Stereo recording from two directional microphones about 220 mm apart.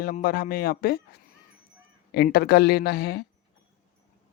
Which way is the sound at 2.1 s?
45° left (ahead or behind).